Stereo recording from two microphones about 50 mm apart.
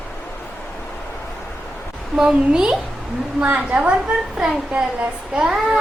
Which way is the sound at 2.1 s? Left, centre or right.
Centre.